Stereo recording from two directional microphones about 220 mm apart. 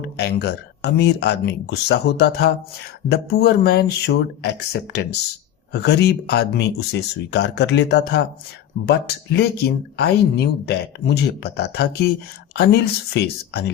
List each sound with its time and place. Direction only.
0.0 s speech: 50° left (ahead or behind)
9.3 s speech: 50° left (ahead or behind)